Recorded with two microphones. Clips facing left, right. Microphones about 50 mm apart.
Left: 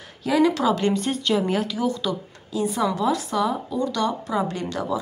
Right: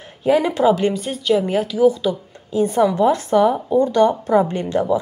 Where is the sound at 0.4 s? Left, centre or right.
Right.